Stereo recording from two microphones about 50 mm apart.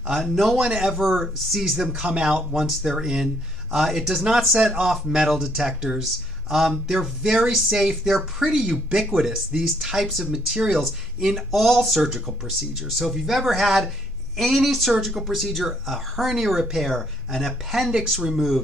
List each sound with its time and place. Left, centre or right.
0.1 s speech: centre
0.6 s speech: centre
0.9 s speech: centre
5.1 s speech: centre